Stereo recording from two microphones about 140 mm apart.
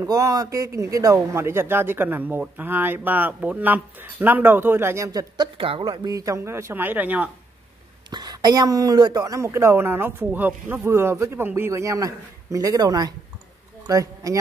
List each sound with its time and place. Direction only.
0.0 s a man's voice: 25° right (ahead or behind)
5.6 s speech: 40° right (ahead or behind)
6.0 s a man's voice: 25° right (ahead or behind)
8.1 s speech: 30° right (ahead or behind)